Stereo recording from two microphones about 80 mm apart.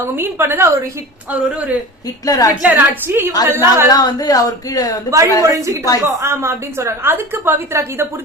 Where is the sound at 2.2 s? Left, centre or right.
Left.